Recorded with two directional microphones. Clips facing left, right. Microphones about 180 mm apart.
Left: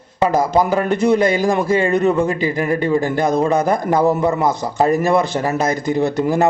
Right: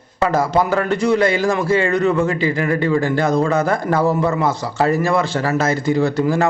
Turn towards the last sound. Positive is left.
turn(degrees=20)  # may be behind; listen again after turning